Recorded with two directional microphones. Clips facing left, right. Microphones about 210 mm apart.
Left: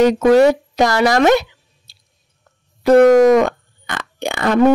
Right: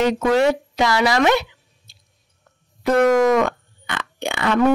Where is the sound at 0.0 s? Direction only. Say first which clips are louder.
Left 6 dB; 40° left (ahead or behind).